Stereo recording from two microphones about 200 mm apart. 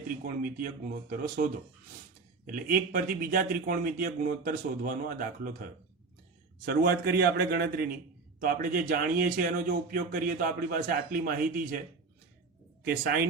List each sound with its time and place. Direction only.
0.3 s a man's voice: 45° right (ahead or behind)
2.5 s a man's voice: 45° right (ahead or behind)
6.7 s a man's voice: 50° right (ahead or behind)
12.8 s speech: 50° right (ahead or behind)